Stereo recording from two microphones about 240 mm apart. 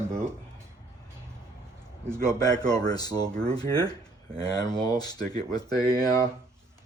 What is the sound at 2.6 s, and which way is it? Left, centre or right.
Speech, centre.